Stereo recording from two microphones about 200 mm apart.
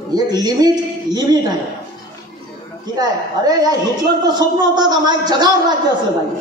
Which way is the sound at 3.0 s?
20° right (ahead or behind).